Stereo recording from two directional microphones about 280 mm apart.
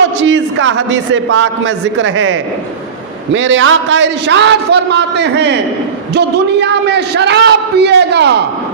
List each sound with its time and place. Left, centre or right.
0.2 s a man's voice: right